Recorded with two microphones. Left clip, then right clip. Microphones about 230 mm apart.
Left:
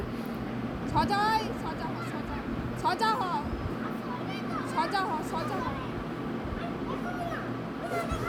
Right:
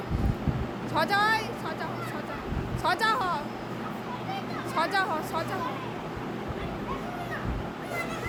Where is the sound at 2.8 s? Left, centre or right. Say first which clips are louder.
Right 2 dB; right.